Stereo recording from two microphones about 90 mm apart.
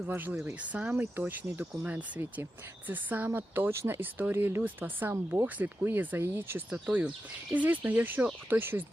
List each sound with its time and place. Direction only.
0.1 s speech: 20° right (ahead or behind)
6.7 s speech: 10° right (ahead or behind)